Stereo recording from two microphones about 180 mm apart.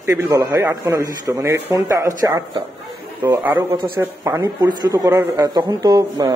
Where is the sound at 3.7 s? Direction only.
25° right (ahead or behind).